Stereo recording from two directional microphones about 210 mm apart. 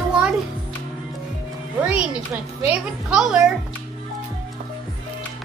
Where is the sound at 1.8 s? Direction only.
10° right (ahead or behind).